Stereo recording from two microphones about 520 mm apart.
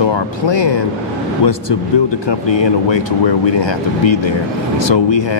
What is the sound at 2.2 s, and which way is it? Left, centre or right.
Speech, left.